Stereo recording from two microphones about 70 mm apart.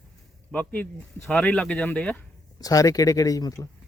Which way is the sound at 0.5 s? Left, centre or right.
Left.